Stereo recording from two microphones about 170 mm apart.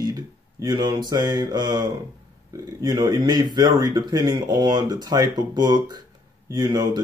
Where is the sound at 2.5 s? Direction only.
25° right (ahead or behind).